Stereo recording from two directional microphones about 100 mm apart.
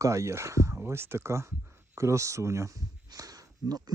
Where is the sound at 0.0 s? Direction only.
30° right (ahead or behind).